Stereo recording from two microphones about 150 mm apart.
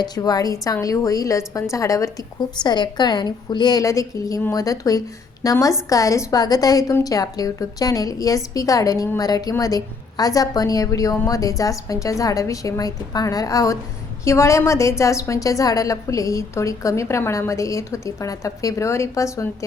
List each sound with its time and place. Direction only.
0.0 s a woman's voice: 25° left (ahead or behind)